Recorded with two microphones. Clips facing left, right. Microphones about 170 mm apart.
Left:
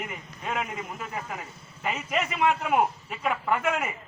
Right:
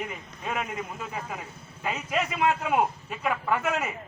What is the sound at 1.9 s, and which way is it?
A man's voice, 10° left (ahead or behind).